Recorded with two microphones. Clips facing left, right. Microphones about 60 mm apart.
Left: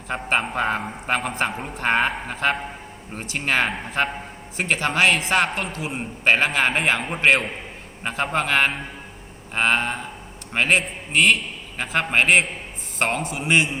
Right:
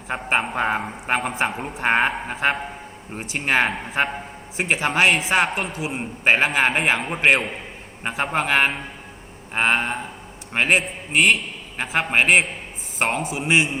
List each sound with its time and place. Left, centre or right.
0.1 s a man's voice: centre